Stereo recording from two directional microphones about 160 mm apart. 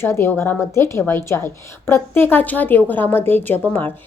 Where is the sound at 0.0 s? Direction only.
15° left (ahead or behind).